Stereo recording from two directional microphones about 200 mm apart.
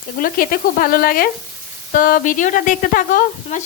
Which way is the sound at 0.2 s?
45° left (ahead or behind).